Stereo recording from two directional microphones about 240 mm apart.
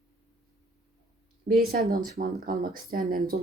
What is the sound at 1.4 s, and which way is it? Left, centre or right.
Speech, right.